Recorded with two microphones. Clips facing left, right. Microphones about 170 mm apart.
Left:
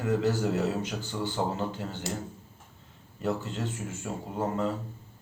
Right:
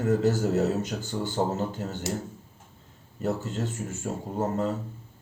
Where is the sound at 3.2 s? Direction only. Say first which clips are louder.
Right 2 dB; 40° right (ahead or behind).